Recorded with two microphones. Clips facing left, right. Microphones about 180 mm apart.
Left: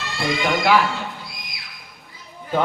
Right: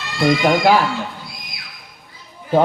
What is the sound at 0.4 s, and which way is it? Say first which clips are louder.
Speech: right 3 dB; 40° right (ahead or behind).